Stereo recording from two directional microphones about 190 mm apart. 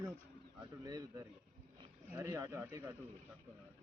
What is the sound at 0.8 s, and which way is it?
Speech, 20° right (ahead or behind).